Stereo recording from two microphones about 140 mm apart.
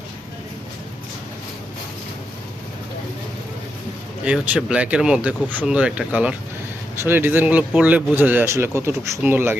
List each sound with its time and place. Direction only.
4.2 s speech: 10° right (ahead or behind)